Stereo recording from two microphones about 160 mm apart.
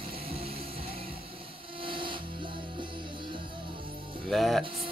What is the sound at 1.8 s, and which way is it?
Music, 30° right (ahead or behind).